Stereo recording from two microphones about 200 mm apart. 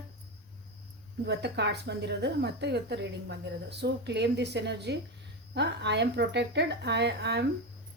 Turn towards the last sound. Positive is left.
turn(degrees=-55)  # may be behind; listen again after turning